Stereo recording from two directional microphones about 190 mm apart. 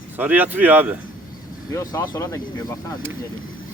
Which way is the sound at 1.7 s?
15° left (ahead or behind).